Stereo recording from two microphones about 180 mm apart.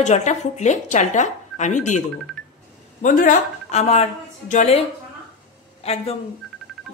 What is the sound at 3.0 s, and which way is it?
A woman's voice, 40° left (ahead or behind).